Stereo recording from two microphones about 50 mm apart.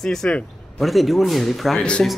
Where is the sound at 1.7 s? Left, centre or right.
Left.